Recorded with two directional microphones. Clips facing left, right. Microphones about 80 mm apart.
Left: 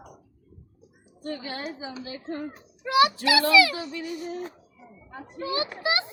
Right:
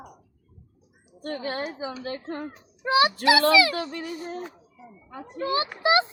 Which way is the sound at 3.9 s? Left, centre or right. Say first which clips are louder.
Even; right.